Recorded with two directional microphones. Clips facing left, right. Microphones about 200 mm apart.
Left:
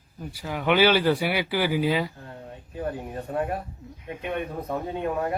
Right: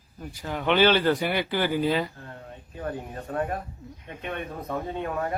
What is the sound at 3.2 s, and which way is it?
A man's voice, 10° left (ahead or behind).